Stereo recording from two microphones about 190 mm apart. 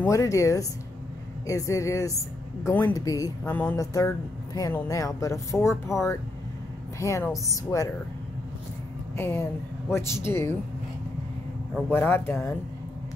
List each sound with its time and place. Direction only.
0.1 s speech: 15° left (ahead or behind)
7.0 s speech: 15° left (ahead or behind)
9.1 s speech: 10° left (ahead or behind)
11.9 s speech: 10° left (ahead or behind)